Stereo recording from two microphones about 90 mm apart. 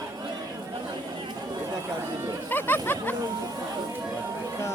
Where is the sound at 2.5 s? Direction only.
25° left (ahead or behind).